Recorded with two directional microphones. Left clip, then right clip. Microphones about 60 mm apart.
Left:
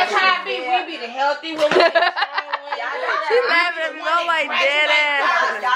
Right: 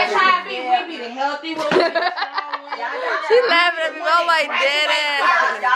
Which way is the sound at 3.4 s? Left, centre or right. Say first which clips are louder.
Right 2 dB; right.